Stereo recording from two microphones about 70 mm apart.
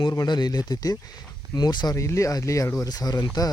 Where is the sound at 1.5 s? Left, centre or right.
Left.